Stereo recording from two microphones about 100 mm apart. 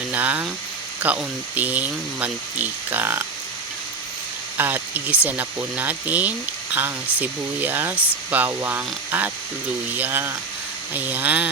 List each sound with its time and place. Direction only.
0.1 s speech: 15° right (ahead or behind)
4.5 s speech: 20° right (ahead or behind)